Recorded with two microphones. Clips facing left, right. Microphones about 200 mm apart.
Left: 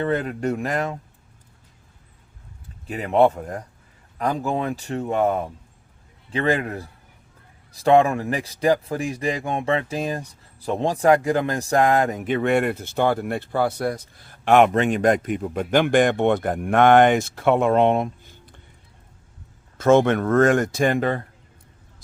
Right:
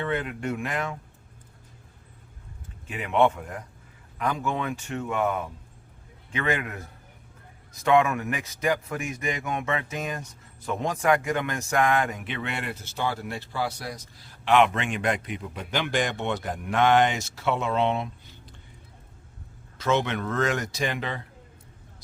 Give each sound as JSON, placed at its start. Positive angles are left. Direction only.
{"t": 0.0, "sound": "speech", "side_deg": 40}
{"t": 2.8, "sound": "speech", "side_deg": 40}
{"t": 19.8, "sound": "speech", "side_deg": 50}